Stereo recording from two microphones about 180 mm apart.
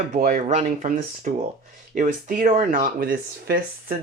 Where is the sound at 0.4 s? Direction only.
35° right (ahead or behind).